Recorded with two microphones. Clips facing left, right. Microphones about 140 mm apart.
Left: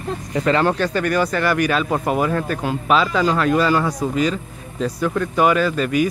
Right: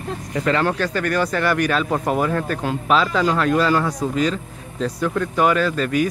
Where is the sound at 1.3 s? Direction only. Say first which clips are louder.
Left 1 dB; 5° left (ahead or behind).